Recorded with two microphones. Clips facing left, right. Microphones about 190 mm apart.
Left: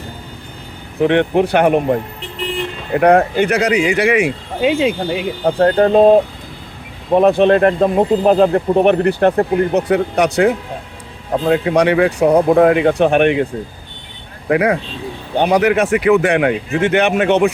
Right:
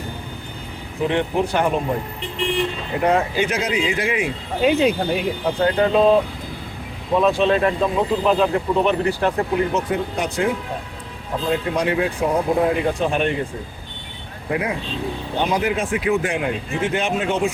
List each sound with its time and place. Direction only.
1.0 s speech: 65° left (ahead or behind)
3.0 s speech: 60° left (ahead or behind)
4.6 s speech: 25° left (ahead or behind)
5.5 s speech: 50° left (ahead or behind)
7.1 s speech: 60° left (ahead or behind)
14.5 s speech: 75° left (ahead or behind)